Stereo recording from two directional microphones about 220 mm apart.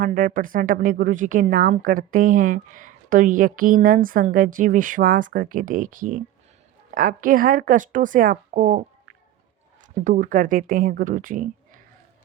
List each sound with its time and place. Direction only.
0.0 s speech: 40° right (ahead or behind)
10.0 s speech: 35° right (ahead or behind)